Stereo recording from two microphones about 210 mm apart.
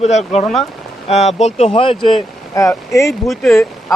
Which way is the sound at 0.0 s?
30° left (ahead or behind).